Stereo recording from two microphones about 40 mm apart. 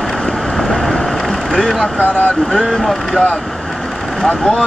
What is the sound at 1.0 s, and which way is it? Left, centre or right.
Vehicle, centre.